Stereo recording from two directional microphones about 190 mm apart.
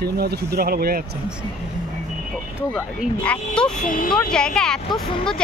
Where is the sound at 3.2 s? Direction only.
5° left (ahead or behind).